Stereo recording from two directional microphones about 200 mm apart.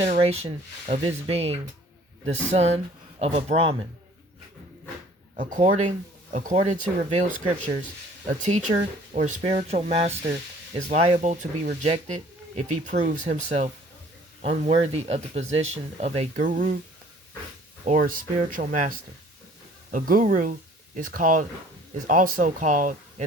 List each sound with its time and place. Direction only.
0.0 s speech: 30° right (ahead or behind)
5.4 s speech: 40° right (ahead or behind)
17.8 s speech: 45° right (ahead or behind)